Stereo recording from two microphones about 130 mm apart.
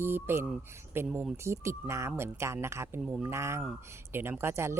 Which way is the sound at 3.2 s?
20° right (ahead or behind).